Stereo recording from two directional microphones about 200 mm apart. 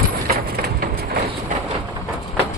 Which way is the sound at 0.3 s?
50° right (ahead or behind).